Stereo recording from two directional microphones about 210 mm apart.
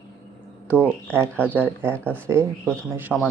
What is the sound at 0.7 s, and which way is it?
Speech, 5° right (ahead or behind).